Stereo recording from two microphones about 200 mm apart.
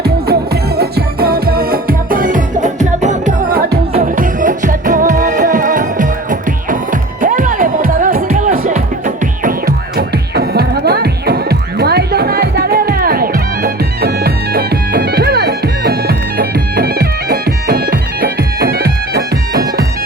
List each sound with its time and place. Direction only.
0.0 s music: 50° right (ahead or behind)
10.0 s music: 50° right (ahead or behind)